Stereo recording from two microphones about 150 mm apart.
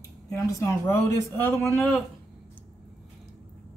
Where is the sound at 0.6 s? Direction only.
20° left (ahead or behind).